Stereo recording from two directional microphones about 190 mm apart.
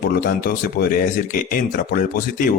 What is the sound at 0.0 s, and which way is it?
A man's voice, 50° left (ahead or behind).